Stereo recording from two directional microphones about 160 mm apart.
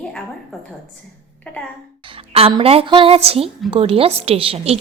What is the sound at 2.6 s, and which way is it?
A woman's voice, 35° right (ahead or behind).